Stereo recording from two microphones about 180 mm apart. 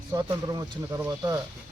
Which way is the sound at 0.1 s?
15° right (ahead or behind).